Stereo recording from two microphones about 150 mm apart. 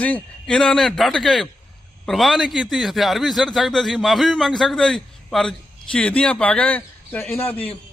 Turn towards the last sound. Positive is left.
turn(degrees=10)  # may be behind; listen again after turning